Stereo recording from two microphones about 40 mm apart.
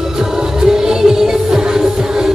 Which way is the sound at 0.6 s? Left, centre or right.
Centre.